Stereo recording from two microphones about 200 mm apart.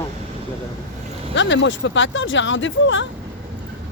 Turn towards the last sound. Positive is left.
turn(degrees=70)  # may be behind; listen again after turning